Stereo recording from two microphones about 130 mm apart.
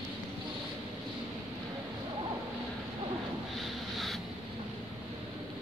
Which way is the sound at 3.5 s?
Centre (ahead or behind).